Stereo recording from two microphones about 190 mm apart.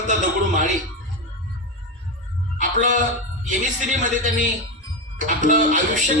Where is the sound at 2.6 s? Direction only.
40° right (ahead or behind).